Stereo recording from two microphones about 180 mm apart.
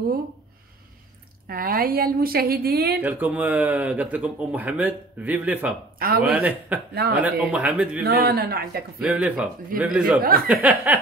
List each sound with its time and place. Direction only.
1.5 s a woman's voice: 55° right (ahead or behind)
3.0 s speech: 10° right (ahead or behind)
5.9 s speech: 55° right (ahead or behind)
6.2 s speech: 10° right (ahead or behind)
6.9 s a woman's voice: 60° right (ahead or behind)
7.2 s speech: 5° right (ahead or behind)
8.0 s a woman's voice: 60° right (ahead or behind)
9.0 s speech: 10° right (ahead or behind)